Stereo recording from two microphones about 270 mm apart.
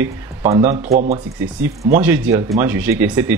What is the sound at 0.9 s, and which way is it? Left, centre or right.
Speech, right.